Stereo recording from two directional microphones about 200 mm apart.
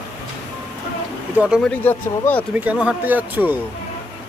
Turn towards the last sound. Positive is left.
turn(degrees=-10)  # may be behind; listen again after turning